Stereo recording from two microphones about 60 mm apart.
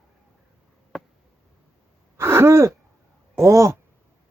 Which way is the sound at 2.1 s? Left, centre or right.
Right.